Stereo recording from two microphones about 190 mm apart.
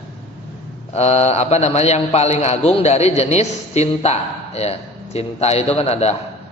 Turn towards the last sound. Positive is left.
turn(degrees=35)  # may be behind; listen again after turning